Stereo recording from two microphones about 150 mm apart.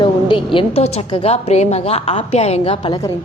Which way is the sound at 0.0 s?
35° left (ahead or behind).